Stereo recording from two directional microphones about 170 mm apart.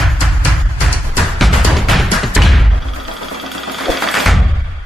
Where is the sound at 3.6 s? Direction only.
Centre (ahead or behind).